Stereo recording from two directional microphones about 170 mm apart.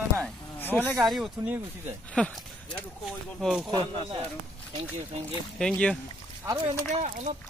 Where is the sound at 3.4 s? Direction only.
5° right (ahead or behind).